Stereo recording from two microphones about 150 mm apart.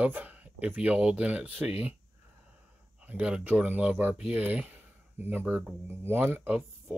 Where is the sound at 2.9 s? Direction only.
5° right (ahead or behind).